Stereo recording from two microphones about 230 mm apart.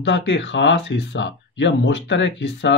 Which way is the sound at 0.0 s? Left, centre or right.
Left.